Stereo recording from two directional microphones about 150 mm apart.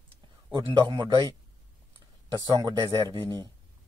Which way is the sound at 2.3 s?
25° right (ahead or behind).